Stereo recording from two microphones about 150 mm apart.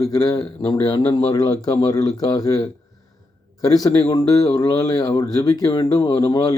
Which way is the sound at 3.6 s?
25° left (ahead or behind).